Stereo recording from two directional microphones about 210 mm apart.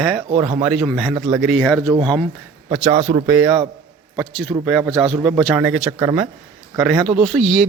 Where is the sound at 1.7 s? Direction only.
20° right (ahead or behind).